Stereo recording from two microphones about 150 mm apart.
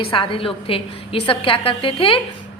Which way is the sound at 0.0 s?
35° left (ahead or behind).